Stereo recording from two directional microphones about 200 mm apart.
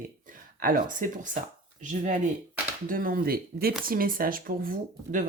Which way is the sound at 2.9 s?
45° right (ahead or behind).